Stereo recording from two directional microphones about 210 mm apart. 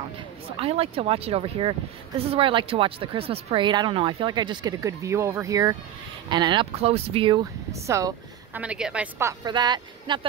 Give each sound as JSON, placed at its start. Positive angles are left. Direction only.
{"t": 0.6, "sound": "speech", "side_deg": -25}
{"t": 8.5, "sound": "a woman's voice", "side_deg": -5}
{"t": 9.4, "sound": "speech", "side_deg": -20}